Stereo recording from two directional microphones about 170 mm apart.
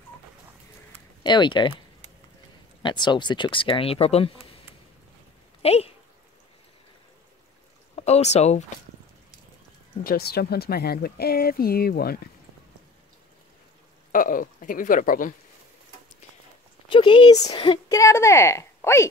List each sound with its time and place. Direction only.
1.2 s speech: 25° left (ahead or behind)
2.8 s speech: 25° left (ahead or behind)
5.6 s speech: 35° left (ahead or behind)
7.9 s speech: 40° left (ahead or behind)
10.0 s speech: 65° left (ahead or behind)
14.1 s speech: 55° left (ahead or behind)
16.9 s a woman's voice: 30° left (ahead or behind)